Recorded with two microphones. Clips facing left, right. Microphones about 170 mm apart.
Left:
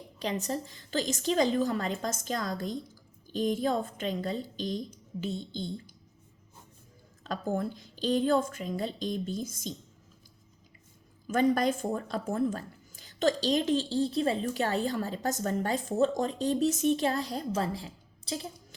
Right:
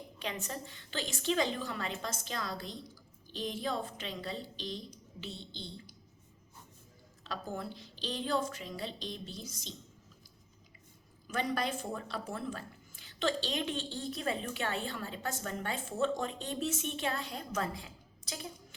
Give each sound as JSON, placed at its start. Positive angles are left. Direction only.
{"t": 0.2, "sound": "a woman's voice", "side_deg": 35}
{"t": 7.3, "sound": "a woman's voice", "side_deg": 50}
{"t": 11.3, "sound": "speech", "side_deg": 45}